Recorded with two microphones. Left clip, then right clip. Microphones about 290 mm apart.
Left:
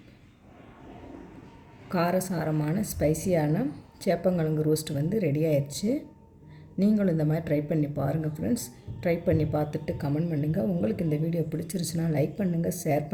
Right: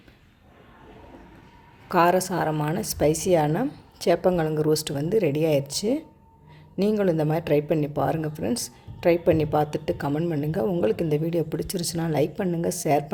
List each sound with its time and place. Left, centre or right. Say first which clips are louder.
1.9 s speech: right 7 dB; right
11.6 s speech: right 5 dB; right
11.9 s speech: right 4 dB; right